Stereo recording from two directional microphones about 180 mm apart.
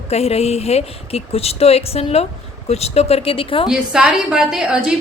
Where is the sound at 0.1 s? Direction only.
35° left (ahead or behind).